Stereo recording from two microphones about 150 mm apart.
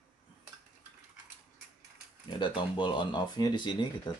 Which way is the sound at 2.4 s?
35° left (ahead or behind).